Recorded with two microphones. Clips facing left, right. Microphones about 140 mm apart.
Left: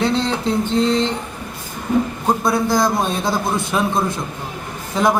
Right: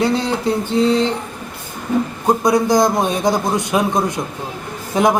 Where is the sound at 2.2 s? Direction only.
15° right (ahead or behind).